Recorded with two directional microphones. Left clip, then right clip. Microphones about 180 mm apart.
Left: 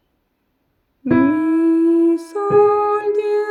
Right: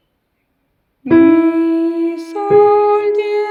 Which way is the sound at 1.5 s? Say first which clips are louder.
Left 1 dB; 45° left (ahead or behind).